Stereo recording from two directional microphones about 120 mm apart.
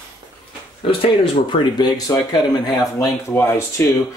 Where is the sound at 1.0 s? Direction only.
45° left (ahead or behind); by 4.2 s 25° left (ahead or behind).